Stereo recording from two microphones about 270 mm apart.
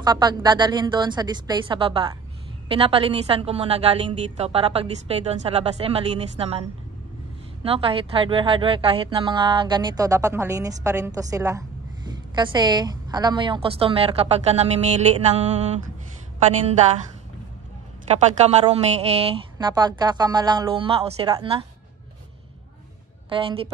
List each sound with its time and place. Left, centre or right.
0.0 s a woman's voice: centre
7.6 s a woman's voice: right
18.1 s a woman's voice: right
23.3 s a woman's voice: centre